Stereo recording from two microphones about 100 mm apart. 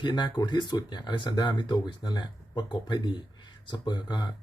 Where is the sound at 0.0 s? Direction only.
50° left (ahead or behind).